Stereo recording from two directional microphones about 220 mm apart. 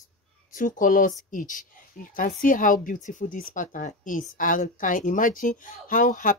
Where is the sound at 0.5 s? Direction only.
35° left (ahead or behind).